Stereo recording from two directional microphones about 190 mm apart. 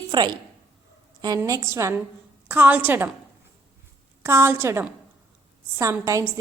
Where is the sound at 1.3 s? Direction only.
15° right (ahead or behind).